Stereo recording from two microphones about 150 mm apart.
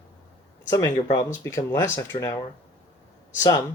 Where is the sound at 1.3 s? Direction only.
20° left (ahead or behind).